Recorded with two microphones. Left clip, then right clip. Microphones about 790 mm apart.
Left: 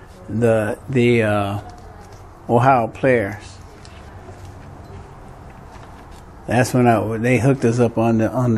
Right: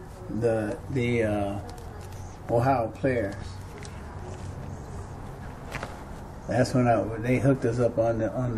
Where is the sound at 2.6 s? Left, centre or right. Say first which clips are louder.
Left 10 dB; left.